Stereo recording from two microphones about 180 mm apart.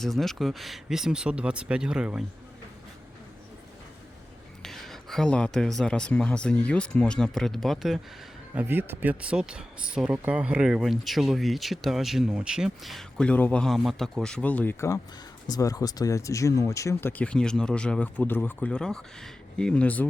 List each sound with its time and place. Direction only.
0.0 s speech: centre (ahead or behind)
4.6 s speech: centre (ahead or behind)
8.5 s speech: 10° right (ahead or behind); by 20.1 s 10° left (ahead or behind)